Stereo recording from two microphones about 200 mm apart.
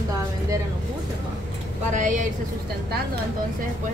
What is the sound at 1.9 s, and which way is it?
Speech, 40° right (ahead or behind).